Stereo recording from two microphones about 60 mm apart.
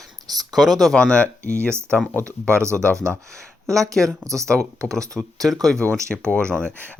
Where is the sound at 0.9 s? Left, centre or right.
Centre.